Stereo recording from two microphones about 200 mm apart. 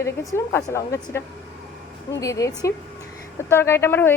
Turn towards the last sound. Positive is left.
turn(degrees=10)  # may be behind; listen again after turning